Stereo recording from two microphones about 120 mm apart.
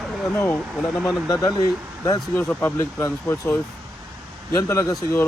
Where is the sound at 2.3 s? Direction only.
15° left (ahead or behind).